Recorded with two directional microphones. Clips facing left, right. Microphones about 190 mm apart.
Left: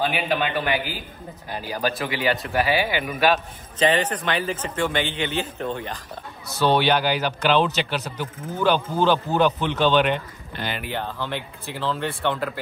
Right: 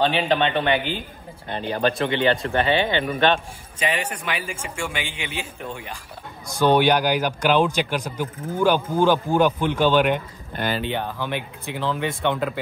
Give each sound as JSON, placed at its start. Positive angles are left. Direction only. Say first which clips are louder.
{"t": 0.0, "sound": "a man's voice", "louder": "right 3 dB", "side_deg": -25}
{"t": 1.5, "sound": "a man's voice", "louder": "right 4 dB", "side_deg": 5}
{"t": 2.1, "sound": "a man's voice", "louder": "right 3 dB", "side_deg": -25}
{"t": 2.5, "sound": "a man's voice", "louder": "right 2 dB", "side_deg": 10}
{"t": 3.8, "sound": "speech", "louder": "left 5 dB", "side_deg": -10}
{"t": 10.5, "sound": "speech", "louder": "right 5 dB", "side_deg": -45}
{"t": 10.8, "sound": "speech", "louder": "right 3 dB", "side_deg": -20}